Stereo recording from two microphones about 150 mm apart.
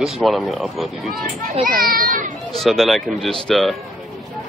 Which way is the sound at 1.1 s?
70° right (ahead or behind).